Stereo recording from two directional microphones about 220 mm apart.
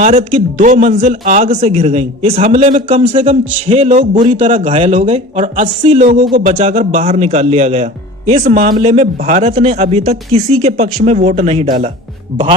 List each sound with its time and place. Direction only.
0.0 s speech: 35° right (ahead or behind)